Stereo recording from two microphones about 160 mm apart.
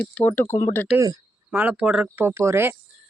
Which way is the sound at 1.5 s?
10° right (ahead or behind).